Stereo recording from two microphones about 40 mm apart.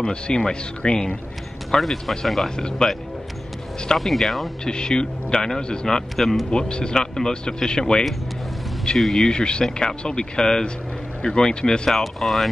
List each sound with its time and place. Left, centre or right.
0.0 s speech: left
1.7 s speech: centre
2.4 s speech: centre
4.0 s speech: centre
4.6 s speech: centre
6.1 s speech: centre
6.5 s speech: centre
12.0 s speech: centre